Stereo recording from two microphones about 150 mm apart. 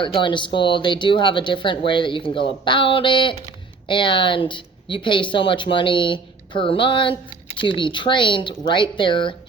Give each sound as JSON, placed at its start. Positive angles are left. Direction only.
{"t": 0.0, "sound": "speech", "side_deg": 35}